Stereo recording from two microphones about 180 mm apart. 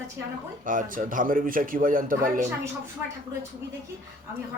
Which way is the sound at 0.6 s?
50° right (ahead or behind).